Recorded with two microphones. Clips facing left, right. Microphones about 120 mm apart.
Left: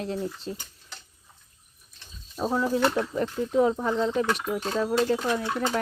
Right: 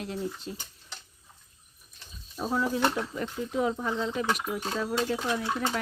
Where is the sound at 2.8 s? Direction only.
10° right (ahead or behind).